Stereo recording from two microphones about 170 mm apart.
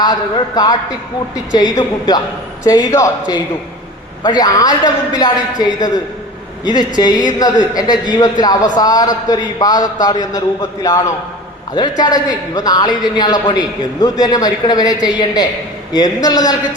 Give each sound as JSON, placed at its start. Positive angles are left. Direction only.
{"t": 0.0, "sound": "a man's voice", "side_deg": 25}